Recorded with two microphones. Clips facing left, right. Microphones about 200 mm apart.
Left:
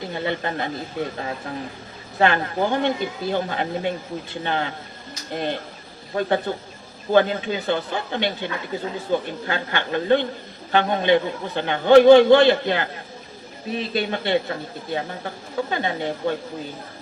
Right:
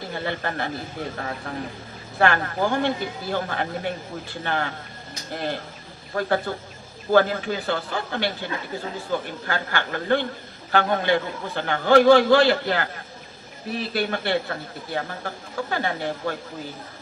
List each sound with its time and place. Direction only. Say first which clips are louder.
0.1 s a man's voice: left 2 dB; 20° left (ahead or behind)